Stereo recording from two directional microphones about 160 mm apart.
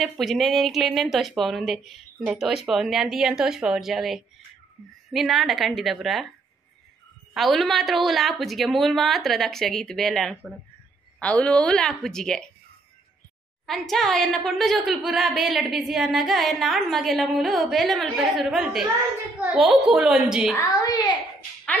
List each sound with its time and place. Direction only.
0.0 s a woman's voice: centre (ahead or behind)
7.3 s a woman's voice: centre (ahead or behind)
13.7 s a woman's voice: centre (ahead or behind)
20.8 s a child's voice: 25° left (ahead or behind)